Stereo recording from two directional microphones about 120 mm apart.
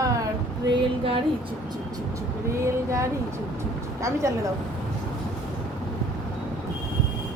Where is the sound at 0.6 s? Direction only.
50° right (ahead or behind).